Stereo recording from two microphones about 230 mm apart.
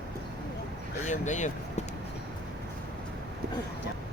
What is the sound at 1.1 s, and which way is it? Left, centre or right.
Speech, left.